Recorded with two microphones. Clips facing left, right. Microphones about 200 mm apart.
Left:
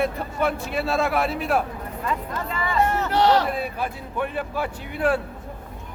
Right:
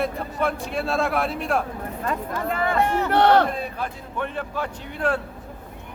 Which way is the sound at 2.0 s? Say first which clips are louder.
Right 2 dB; 55° right (ahead or behind).